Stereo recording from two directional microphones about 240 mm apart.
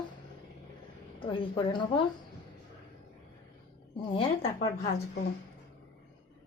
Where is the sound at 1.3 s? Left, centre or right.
Centre.